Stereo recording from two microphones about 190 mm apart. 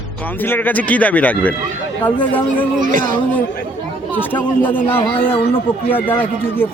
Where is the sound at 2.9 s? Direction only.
45° right (ahead or behind).